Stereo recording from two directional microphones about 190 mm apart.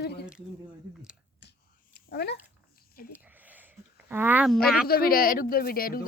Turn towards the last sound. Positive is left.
turn(degrees=50)  # may be behind; listen again after turning